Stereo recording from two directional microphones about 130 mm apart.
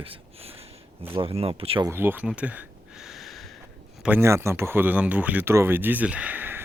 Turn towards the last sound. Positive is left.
turn(degrees=-15)  # may be behind; listen again after turning